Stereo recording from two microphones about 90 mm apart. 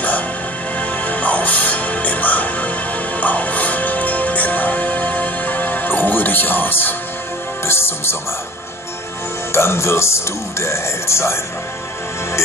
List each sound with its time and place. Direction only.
0.7 s music: 15° left (ahead or behind)
9.5 s speech: 30° left (ahead or behind)